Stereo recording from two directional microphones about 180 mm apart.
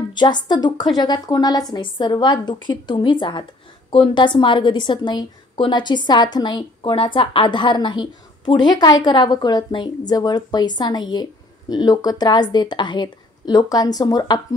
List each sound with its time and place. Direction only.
0.1 s a woman's voice: 25° left (ahead or behind)